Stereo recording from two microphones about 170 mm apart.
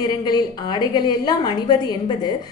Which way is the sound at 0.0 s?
25° left (ahead or behind).